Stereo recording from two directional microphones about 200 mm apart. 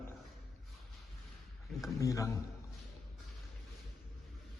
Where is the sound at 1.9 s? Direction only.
15° left (ahead or behind).